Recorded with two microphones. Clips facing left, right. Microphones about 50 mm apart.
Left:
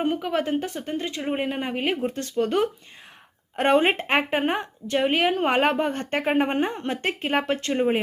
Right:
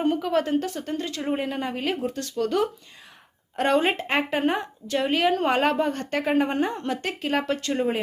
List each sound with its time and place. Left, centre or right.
0.0 s a woman's voice: centre